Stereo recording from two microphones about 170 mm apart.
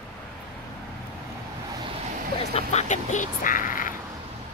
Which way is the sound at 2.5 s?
40° left (ahead or behind).